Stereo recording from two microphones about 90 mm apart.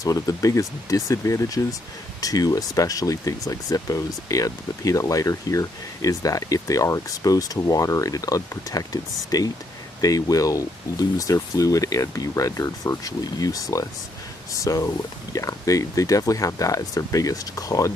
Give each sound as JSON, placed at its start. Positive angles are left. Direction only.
{"t": 0.0, "sound": "speech", "side_deg": 40}